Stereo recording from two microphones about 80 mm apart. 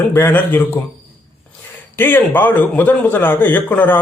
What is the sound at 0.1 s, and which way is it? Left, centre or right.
Speech, left.